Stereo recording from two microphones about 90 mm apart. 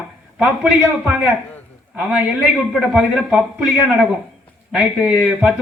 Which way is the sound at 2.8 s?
10° right (ahead or behind).